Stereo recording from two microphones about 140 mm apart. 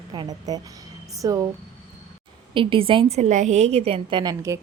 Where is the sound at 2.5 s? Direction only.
40° right (ahead or behind).